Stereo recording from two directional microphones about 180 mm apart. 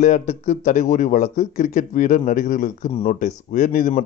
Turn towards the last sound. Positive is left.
turn(degrees=45)  # may be behind; listen again after turning